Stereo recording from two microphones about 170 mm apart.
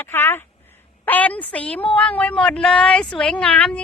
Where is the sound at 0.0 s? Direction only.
15° left (ahead or behind).